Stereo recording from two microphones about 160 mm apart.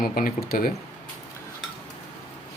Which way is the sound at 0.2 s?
65° left (ahead or behind).